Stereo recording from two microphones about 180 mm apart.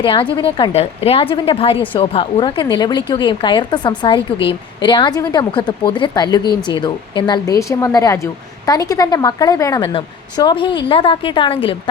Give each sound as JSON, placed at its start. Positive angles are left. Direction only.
{"t": 0.0, "sound": "a woman's voice", "side_deg": 30}